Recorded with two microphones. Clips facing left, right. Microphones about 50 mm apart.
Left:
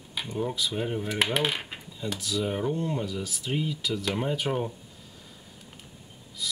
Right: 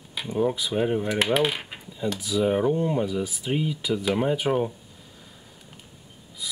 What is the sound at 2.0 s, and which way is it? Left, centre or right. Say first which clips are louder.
Speech: right 6 dB; centre.